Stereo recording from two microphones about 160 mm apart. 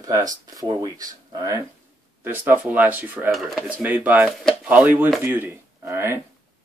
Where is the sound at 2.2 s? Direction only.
10° right (ahead or behind).